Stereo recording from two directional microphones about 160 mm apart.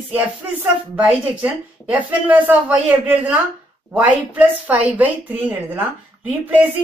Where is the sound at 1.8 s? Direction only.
10° right (ahead or behind).